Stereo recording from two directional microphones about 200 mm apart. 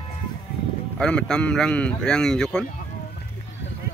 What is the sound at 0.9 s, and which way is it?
A man's voice, 5° left (ahead or behind).